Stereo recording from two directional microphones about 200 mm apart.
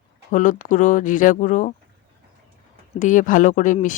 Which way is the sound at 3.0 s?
40° left (ahead or behind).